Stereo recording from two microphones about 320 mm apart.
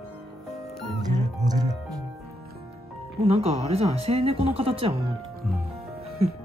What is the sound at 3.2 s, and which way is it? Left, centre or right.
Speech, centre.